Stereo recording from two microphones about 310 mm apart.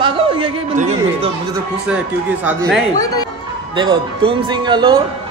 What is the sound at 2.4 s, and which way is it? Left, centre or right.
Speech, centre.